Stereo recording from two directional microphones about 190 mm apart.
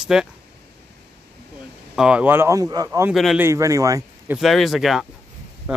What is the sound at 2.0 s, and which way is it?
Speech, 5° right (ahead or behind).